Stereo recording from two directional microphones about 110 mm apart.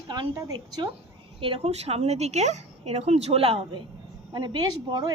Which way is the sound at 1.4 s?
60° right (ahead or behind).